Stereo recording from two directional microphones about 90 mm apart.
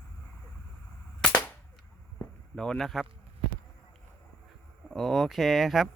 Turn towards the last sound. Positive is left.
turn(degrees=0)  # may be behind; listen again after turning